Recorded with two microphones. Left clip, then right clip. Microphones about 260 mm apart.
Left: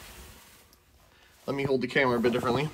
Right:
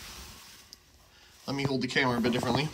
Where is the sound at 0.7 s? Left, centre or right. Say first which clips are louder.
Right 5 dB; centre.